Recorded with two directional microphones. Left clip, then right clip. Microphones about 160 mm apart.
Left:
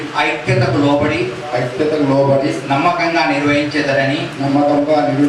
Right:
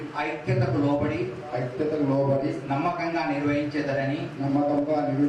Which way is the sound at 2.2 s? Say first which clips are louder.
Left 12 dB; 35° right (ahead or behind).